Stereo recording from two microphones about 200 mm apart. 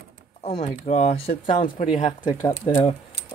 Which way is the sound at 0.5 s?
30° left (ahead or behind).